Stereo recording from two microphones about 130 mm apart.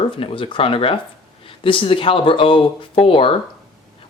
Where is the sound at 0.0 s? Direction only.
45° left (ahead or behind).